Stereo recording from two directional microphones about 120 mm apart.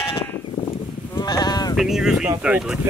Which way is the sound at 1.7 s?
5° right (ahead or behind).